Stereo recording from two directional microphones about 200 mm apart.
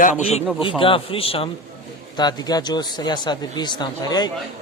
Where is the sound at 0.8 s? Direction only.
25° left (ahead or behind).